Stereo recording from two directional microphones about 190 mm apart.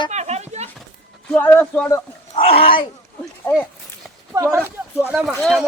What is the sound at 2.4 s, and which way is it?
Speech, 30° left (ahead or behind).